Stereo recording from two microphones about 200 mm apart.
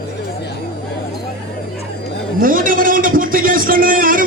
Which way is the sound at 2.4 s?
45° right (ahead or behind).